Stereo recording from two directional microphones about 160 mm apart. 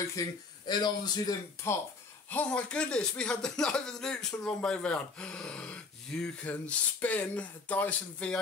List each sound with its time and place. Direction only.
0.2 s speech: 20° left (ahead or behind)
2.3 s speech: 5° left (ahead or behind)